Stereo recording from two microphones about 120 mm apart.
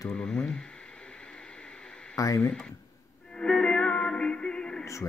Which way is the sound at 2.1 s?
25° left (ahead or behind).